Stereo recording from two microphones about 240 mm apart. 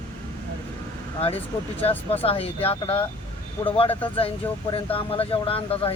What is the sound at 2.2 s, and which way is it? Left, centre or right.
Speech, left.